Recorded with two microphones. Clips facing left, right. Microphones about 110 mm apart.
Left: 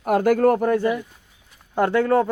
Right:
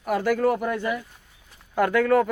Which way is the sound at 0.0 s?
50° left (ahead or behind).